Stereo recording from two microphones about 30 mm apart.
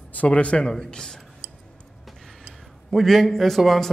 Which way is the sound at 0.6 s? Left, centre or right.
Left.